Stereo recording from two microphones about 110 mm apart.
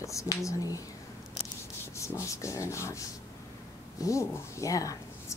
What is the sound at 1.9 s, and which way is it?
A woman's voice, 25° left (ahead or behind).